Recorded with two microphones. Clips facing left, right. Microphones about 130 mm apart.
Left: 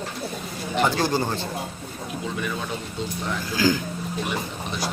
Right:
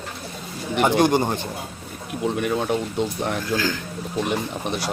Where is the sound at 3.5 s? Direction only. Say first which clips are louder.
Left 6 dB; 10° left (ahead or behind).